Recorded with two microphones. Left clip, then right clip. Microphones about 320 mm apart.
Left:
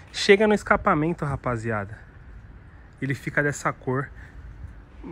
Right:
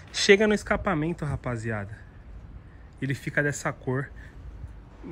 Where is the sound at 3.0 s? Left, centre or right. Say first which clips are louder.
Left 2 dB; centre.